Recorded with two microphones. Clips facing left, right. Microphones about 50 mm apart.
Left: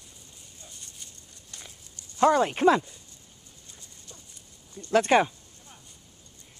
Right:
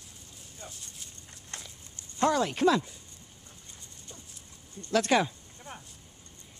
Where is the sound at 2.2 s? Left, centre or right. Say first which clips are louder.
Left 4 dB; centre.